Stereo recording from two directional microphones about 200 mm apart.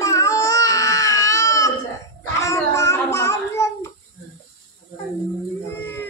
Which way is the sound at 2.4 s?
15° left (ahead or behind).